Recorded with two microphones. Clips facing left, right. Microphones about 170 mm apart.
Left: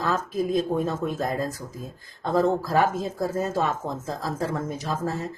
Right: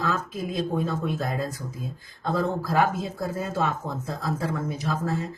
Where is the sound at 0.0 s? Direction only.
40° left (ahead or behind).